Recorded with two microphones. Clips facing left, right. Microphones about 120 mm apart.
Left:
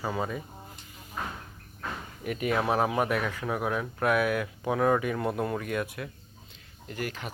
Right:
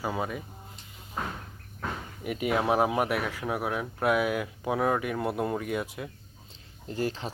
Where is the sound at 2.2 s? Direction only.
15° right (ahead or behind).